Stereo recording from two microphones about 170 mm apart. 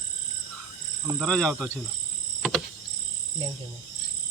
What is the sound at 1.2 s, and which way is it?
Speech, 5° left (ahead or behind).